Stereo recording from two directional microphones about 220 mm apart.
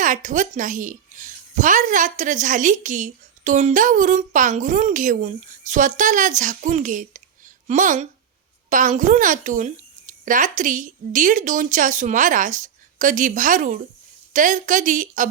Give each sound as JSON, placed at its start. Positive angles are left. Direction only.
{"t": 0.0, "sound": "speech", "side_deg": -35}